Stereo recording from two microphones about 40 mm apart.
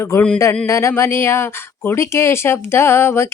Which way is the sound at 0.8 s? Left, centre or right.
Left.